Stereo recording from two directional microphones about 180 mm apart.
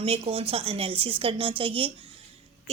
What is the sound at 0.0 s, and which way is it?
A woman's voice, 30° right (ahead or behind).